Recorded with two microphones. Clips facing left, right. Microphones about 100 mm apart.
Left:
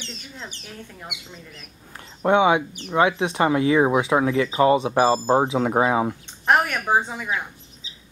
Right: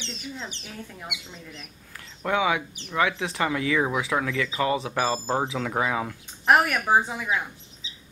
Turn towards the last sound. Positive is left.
turn(degrees=-5)  # may be behind; listen again after turning